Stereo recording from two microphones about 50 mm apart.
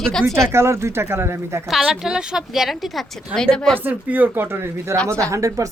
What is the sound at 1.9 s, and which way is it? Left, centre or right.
Speech, centre.